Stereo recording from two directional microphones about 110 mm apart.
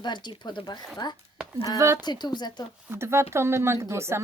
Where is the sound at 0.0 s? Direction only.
45° left (ahead or behind).